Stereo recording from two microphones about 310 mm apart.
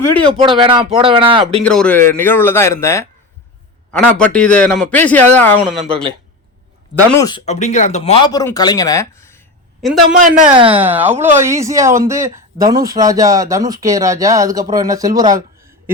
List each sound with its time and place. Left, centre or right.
0.2 s speech: centre
1.6 s a man's voice: centre
7.2 s a man's voice: centre
10.2 s speech: right
10.8 s speech: centre
12.7 s speech: right
13.0 s speech: centre